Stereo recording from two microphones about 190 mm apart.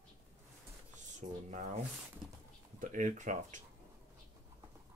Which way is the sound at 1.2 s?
40° right (ahead or behind).